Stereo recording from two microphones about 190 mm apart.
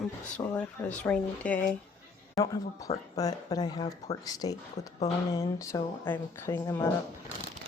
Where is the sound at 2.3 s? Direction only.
15° left (ahead or behind).